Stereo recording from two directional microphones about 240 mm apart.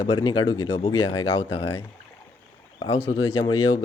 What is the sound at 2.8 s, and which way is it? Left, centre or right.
Speech, left.